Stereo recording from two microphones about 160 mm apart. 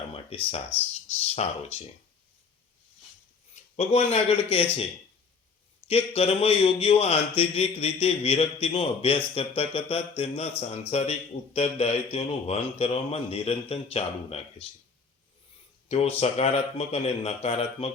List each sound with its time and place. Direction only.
0.3 s a man's voice: 35° left (ahead or behind)
3.5 s speech: 40° left (ahead or behind)
5.9 s a man's voice: 40° left (ahead or behind)
15.9 s a man's voice: 40° left (ahead or behind)